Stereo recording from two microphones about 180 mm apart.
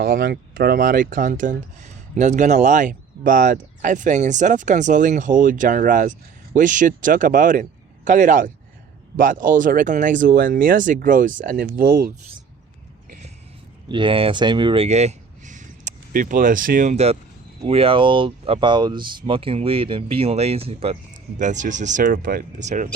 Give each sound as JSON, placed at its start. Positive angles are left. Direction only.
{"t": 0.0, "sound": "speech", "side_deg": -55}
{"t": 13.8, "sound": "speech", "side_deg": -25}